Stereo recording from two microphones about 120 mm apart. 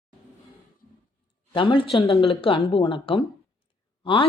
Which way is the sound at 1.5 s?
45° left (ahead or behind).